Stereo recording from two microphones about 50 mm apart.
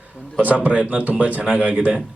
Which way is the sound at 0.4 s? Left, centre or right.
Right.